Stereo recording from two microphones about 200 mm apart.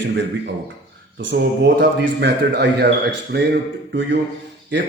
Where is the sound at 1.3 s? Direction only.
60° right (ahead or behind).